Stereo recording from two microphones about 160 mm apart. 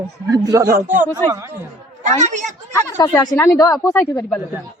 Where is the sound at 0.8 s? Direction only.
55° right (ahead or behind).